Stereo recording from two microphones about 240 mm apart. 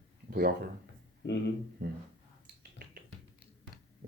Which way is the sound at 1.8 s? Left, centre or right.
Right.